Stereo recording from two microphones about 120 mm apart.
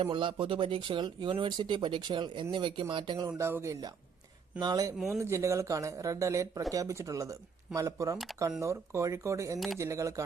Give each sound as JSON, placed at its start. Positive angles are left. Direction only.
{"t": 0.0, "sound": "speech", "side_deg": -45}
{"t": 3.2, "sound": "speech", "side_deg": -25}